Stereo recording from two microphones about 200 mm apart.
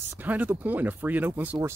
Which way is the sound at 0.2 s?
10° right (ahead or behind).